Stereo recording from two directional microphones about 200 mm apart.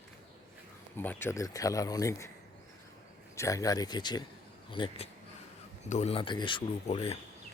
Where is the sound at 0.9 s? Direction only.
10° left (ahead or behind).